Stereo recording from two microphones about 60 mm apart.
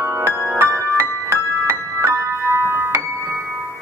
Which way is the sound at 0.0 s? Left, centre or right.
Right.